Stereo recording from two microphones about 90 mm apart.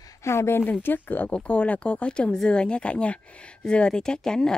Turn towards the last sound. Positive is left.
turn(degrees=5)  # may be behind; listen again after turning